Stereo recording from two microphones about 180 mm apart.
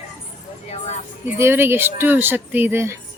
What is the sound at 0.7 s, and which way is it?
Speech, 40° left (ahead or behind).